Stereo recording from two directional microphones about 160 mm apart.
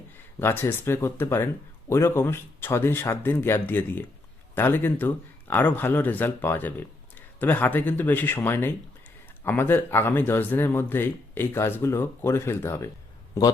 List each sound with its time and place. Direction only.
0.3 s speech: 15° left (ahead or behind)